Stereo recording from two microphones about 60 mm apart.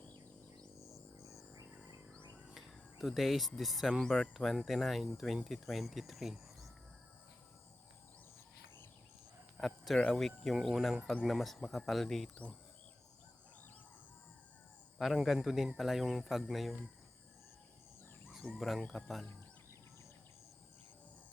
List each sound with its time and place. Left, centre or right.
0.8 s music: left
2.6 s speech: centre
9.6 s speech: centre
14.9 s speech: centre
18.4 s speech: centre